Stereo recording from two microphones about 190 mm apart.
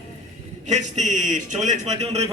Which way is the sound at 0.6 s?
40° right (ahead or behind).